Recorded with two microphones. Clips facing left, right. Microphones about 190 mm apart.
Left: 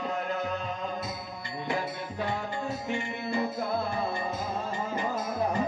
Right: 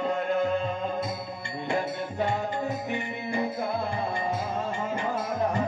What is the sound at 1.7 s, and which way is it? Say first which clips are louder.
Music: right 4 dB; 20° right (ahead or behind).